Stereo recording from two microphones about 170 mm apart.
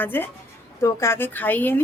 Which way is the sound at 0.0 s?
10° left (ahead or behind).